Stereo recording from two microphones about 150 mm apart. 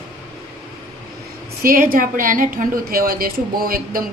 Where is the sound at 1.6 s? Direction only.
70° right (ahead or behind).